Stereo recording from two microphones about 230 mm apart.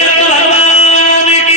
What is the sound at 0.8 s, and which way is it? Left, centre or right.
Music, left.